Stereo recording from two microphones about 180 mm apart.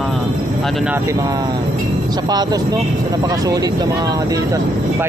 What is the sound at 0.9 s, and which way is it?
Speech, 15° right (ahead or behind).